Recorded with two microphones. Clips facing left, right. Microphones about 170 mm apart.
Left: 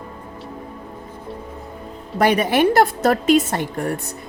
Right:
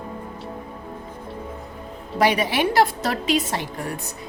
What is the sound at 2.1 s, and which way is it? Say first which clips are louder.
A woman's voice: left 4 dB; 50° left (ahead or behind).